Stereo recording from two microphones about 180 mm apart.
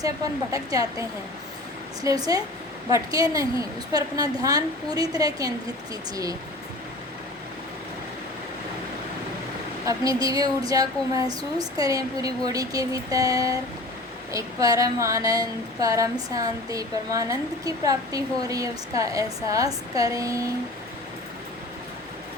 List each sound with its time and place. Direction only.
0.5 s speech: 20° right (ahead or behind)
9.8 s speech: 20° right (ahead or behind)